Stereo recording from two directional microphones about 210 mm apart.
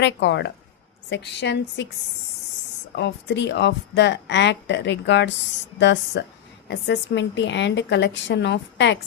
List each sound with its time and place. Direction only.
0.0 s speech: 60° left (ahead or behind)
2.9 s speech: 55° left (ahead or behind)